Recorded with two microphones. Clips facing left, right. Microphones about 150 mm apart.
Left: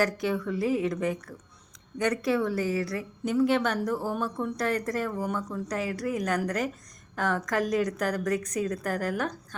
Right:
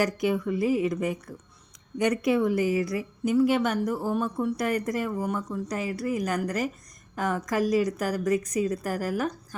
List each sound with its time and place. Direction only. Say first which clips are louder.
0.0 s a woman's voice: right 2 dB; 15° right (ahead or behind)